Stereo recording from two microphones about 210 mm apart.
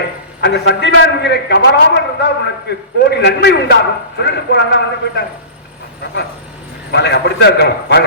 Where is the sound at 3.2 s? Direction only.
55° left (ahead or behind).